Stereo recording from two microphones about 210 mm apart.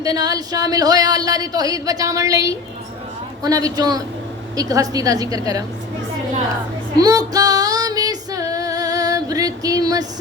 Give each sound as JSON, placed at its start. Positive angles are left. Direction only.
{"t": 0.0, "sound": "speech", "side_deg": -15}
{"t": 6.9, "sound": "female singing", "side_deg": -15}